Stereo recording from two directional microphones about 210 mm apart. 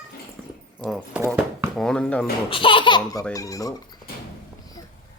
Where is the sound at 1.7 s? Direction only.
5° left (ahead or behind).